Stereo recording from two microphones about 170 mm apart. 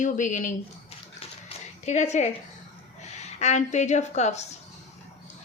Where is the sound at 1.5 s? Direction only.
40° left (ahead or behind).